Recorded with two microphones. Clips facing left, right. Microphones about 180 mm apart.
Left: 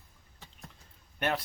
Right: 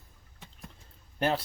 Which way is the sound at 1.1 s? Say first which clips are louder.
Right 3 dB; 30° right (ahead or behind).